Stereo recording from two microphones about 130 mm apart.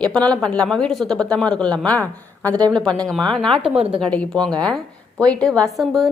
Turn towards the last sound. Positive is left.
turn(degrees=0)  # may be behind; listen again after turning